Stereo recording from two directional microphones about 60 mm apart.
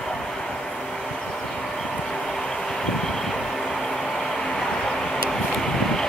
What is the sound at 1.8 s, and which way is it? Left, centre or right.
Vehicle, centre.